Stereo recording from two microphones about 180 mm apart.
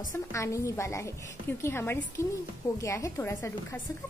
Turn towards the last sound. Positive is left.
turn(degrees=15)  # may be behind; listen again after turning